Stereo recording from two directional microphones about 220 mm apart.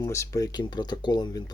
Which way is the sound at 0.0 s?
15° left (ahead or behind).